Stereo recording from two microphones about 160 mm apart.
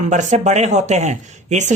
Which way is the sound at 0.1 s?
45° right (ahead or behind).